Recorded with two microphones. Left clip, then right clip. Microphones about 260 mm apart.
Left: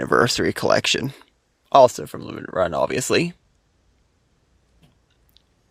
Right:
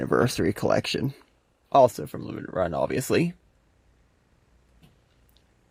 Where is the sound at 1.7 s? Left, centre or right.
Left.